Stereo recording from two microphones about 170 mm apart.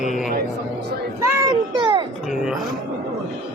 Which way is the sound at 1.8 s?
30° right (ahead or behind).